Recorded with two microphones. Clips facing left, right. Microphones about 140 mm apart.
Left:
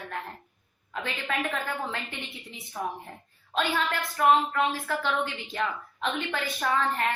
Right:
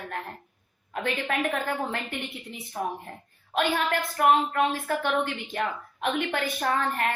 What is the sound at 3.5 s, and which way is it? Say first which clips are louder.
A woman's voice: right 3 dB; 55° right (ahead or behind).